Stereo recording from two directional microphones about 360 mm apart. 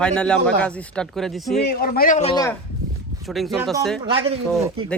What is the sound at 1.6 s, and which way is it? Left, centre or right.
Speech, left.